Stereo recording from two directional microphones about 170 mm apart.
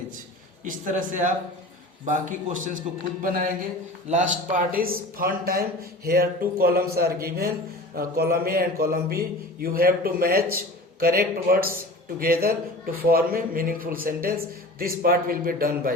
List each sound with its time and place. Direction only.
0.6 s a man's voice: 50° right (ahead or behind)
11.5 s a man's voice: 60° right (ahead or behind)